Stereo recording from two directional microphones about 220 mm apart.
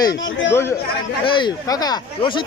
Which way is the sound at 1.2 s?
20° left (ahead or behind).